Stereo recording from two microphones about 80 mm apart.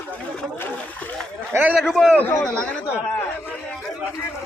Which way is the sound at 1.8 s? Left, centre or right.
Centre.